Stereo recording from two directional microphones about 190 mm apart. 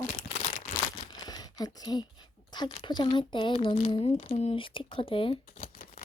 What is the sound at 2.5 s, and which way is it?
Speech, 25° left (ahead or behind).